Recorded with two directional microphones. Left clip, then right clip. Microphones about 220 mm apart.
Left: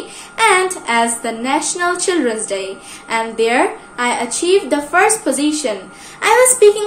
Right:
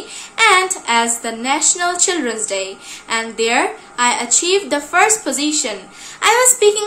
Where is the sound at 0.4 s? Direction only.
15° right (ahead or behind).